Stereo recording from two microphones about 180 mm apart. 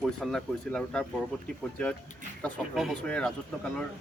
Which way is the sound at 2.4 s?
Centre (ahead or behind).